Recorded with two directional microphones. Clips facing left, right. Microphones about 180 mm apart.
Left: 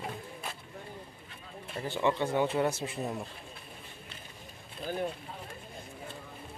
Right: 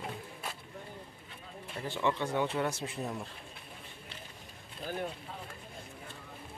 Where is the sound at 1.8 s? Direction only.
Centre (ahead or behind).